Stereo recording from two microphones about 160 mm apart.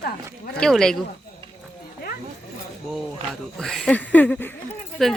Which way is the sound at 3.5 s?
5° left (ahead or behind).